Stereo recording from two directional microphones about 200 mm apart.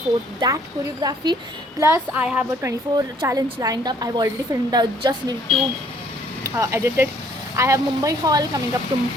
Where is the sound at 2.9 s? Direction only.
20° right (ahead or behind).